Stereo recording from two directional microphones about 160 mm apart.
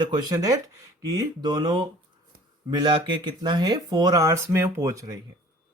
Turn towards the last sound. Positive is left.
turn(degrees=-20)  # may be behind; listen again after turning